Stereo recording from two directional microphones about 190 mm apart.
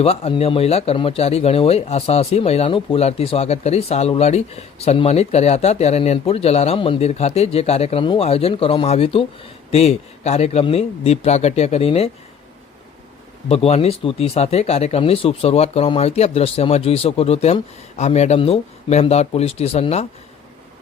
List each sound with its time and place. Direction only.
0.0 s speech: 30° left (ahead or behind)
13.5 s speech: 30° left (ahead or behind)